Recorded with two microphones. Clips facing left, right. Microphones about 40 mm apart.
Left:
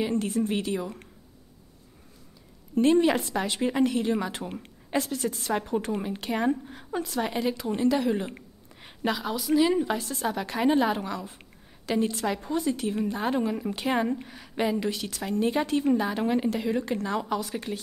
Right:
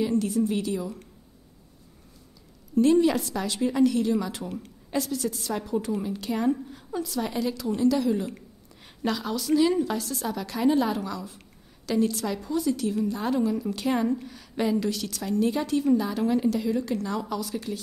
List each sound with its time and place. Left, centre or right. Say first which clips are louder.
0.0 s a woman's voice: right 2 dB; left
2.7 s a woman's voice: right 1 dB; left
9.0 s a woman's voice: even; centre; by 17.7 s left